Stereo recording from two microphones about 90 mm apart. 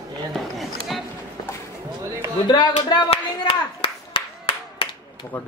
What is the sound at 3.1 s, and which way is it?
Clapping, 85° left.